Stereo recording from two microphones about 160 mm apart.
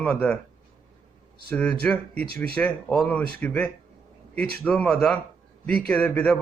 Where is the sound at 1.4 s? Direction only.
5° left (ahead or behind).